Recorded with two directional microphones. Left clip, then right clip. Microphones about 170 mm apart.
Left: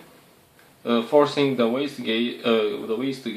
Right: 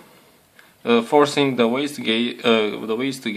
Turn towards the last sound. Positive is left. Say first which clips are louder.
# right 3 dB
turn(degrees=-30)  # may be behind; listen again after turning